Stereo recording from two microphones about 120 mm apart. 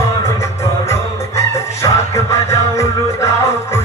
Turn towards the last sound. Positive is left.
turn(degrees=25)  # may be behind; listen again after turning